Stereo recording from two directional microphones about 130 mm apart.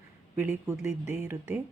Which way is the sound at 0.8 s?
5° right (ahead or behind).